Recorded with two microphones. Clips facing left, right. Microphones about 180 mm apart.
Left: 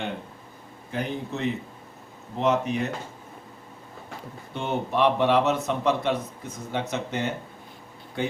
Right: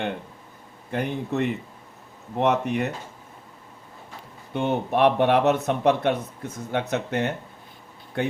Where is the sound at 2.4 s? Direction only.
65° right (ahead or behind).